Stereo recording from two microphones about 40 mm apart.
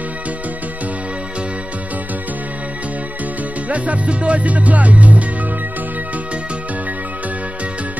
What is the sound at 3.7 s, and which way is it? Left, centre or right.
Music, right.